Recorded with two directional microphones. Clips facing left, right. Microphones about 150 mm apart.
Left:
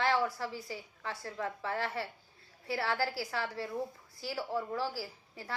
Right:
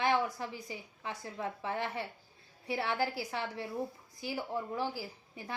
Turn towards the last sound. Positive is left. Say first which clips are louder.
# even
turn(degrees=-20)  # may be behind; listen again after turning